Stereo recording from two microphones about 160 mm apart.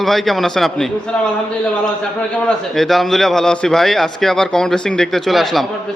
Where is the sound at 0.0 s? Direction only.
Centre (ahead or behind).